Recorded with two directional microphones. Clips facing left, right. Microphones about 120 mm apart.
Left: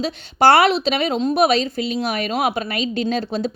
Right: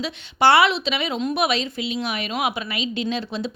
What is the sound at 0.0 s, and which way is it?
A woman's voice, 40° left (ahead or behind).